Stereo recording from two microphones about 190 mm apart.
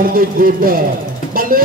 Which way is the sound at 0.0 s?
50° right (ahead or behind).